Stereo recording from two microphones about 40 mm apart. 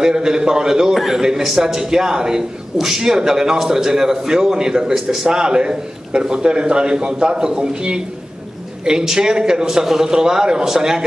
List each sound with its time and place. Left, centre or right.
0.0 s a man's voice: centre